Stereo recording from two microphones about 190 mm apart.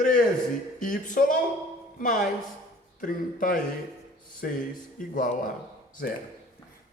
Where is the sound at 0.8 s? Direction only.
45° left (ahead or behind).